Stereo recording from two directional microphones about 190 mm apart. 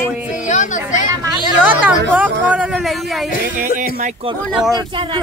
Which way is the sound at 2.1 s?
5° right (ahead or behind).